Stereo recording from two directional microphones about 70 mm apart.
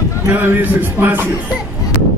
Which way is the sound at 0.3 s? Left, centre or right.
Right.